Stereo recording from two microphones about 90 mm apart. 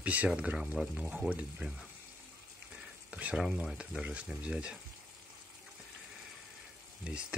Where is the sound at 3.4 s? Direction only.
5° right (ahead or behind).